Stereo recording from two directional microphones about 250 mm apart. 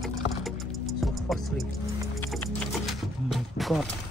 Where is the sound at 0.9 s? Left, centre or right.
Centre.